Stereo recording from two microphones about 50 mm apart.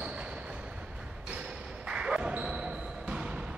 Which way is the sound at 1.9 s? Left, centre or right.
Centre.